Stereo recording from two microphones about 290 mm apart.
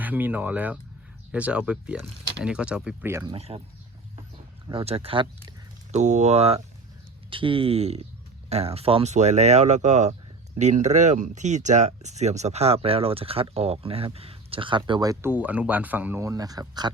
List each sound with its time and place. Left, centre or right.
0.0 s speech: centre
3.3 s speech: right
4.7 s speech: centre